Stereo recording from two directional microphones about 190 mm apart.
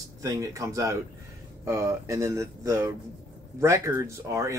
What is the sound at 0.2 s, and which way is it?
Speech, 15° right (ahead or behind).